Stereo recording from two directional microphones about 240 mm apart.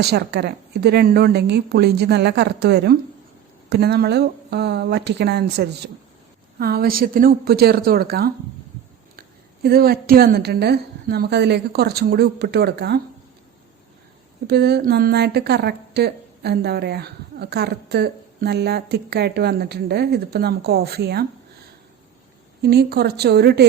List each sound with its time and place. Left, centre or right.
0.0 s a woman's voice: right
9.6 s a woman's voice: right
14.4 s a woman's voice: right
22.6 s a woman's voice: right